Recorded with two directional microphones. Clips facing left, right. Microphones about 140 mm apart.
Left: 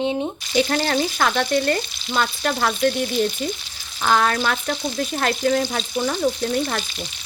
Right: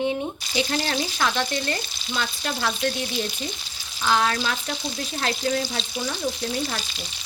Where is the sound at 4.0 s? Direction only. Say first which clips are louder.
Left 3 dB; 55° left (ahead or behind).